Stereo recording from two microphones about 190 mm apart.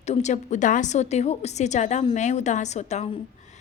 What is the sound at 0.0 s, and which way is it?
A woman's voice, 35° left (ahead or behind).